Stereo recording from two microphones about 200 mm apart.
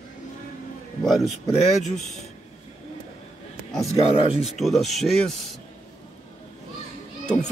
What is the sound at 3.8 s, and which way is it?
Speech, 30° left (ahead or behind).